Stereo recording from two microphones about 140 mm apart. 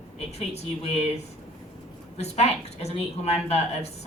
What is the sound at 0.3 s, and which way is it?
Speech, 50° left (ahead or behind).